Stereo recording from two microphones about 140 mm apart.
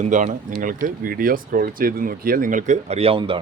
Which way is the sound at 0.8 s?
90° right.